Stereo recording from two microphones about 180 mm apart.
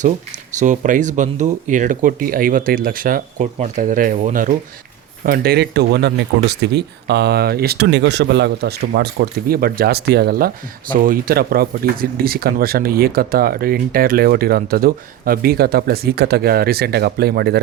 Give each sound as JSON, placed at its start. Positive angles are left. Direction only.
{"t": 0.0, "sound": "speech", "side_deg": -45}